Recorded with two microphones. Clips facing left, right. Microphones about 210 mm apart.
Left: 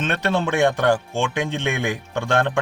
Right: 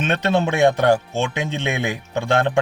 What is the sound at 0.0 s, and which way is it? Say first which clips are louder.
A man's voice: right 2 dB; 20° right (ahead or behind).